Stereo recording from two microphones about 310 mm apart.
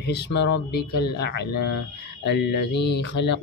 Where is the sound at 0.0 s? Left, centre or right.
Left.